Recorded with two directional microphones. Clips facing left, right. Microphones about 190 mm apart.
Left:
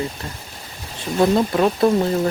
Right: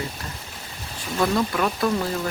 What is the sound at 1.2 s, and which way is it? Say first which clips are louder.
Speech: left 6 dB; 30° left (ahead or behind).